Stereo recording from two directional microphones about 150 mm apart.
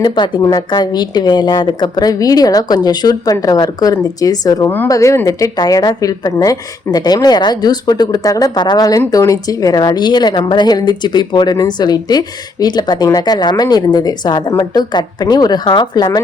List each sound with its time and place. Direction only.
0.0 s speech: 30° left (ahead or behind)